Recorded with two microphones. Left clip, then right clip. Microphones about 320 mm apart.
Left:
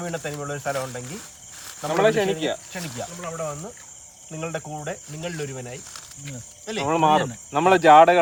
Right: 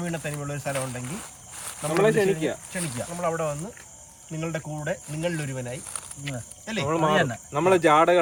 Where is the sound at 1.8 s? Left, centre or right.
Centre.